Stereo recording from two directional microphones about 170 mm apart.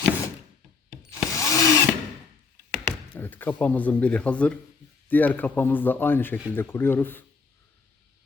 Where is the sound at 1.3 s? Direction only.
20° left (ahead or behind).